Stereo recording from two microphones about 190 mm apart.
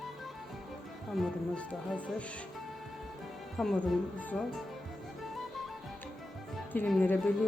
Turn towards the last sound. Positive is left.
turn(degrees=5)  # may be behind; listen again after turning